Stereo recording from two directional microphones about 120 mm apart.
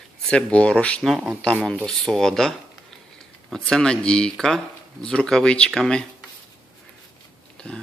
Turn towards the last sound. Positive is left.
turn(degrees=5)  # may be behind; listen again after turning